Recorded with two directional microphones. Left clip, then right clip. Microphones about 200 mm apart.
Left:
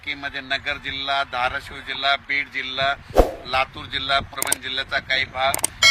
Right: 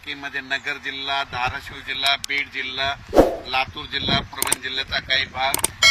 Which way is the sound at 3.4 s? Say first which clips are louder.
Left 1 dB; 20° left (ahead or behind).